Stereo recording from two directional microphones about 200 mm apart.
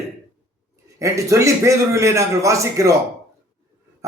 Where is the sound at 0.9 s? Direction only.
15° right (ahead or behind).